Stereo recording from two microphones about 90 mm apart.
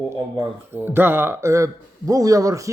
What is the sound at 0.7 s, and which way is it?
Speech, 25° right (ahead or behind).